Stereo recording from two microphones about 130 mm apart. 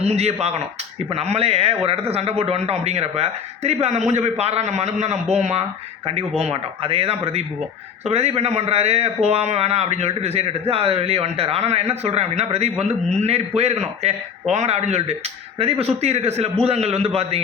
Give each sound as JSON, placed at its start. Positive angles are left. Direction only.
{"t": 0.0, "sound": "a man's voice", "side_deg": -55}
{"t": 6.4, "sound": "a man's voice", "side_deg": -45}